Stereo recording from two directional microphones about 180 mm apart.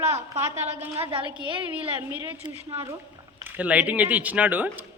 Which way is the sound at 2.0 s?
15° right (ahead or behind).